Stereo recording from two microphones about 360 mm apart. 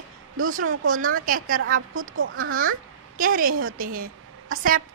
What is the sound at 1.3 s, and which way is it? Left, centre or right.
Speech, right.